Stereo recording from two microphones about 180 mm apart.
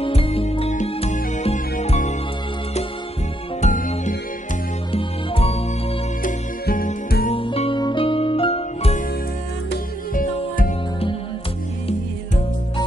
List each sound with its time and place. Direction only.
0.0 s music: 30° left (ahead or behind)
3.6 s music: 45° left (ahead or behind)
4.9 s music: 35° left (ahead or behind)
6.2 s music: 50° left (ahead or behind)
7.3 s music: 30° left (ahead or behind)